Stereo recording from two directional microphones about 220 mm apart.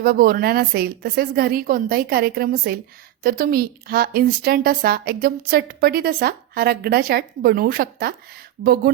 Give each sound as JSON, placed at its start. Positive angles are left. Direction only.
{"t": 0.0, "sound": "a woman's voice", "side_deg": -40}